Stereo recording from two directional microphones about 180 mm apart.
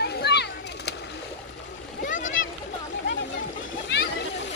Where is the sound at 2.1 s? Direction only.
45° left (ahead or behind).